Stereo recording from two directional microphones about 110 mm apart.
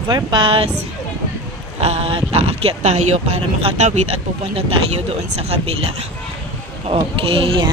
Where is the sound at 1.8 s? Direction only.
65° right (ahead or behind).